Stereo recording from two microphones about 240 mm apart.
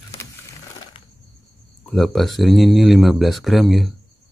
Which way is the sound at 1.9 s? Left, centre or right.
Centre.